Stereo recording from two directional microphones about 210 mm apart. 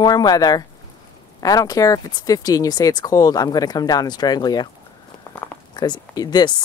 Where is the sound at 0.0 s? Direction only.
20° left (ahead or behind).